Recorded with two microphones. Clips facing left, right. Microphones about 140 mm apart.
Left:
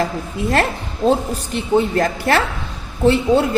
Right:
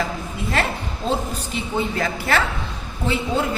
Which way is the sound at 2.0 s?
45° left (ahead or behind).